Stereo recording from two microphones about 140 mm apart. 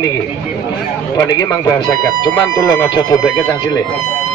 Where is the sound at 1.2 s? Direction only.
25° left (ahead or behind).